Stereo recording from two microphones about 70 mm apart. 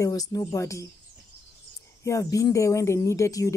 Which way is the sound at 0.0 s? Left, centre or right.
Left.